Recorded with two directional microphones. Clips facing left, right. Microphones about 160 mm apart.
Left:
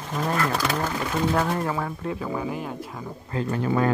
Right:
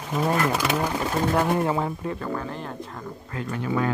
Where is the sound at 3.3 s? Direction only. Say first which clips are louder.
Left 3 dB; 35° left (ahead or behind).